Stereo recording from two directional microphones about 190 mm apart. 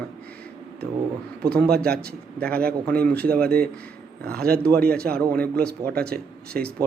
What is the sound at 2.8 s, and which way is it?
Speech, 5° left (ahead or behind).